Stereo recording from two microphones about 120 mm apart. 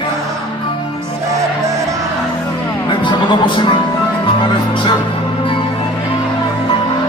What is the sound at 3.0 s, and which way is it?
Speech, 40° left (ahead or behind).